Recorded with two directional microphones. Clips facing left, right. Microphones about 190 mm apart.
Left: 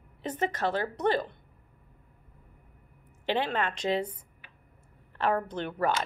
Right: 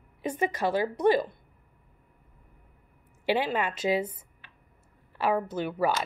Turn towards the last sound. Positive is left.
turn(degrees=-5)  # may be behind; listen again after turning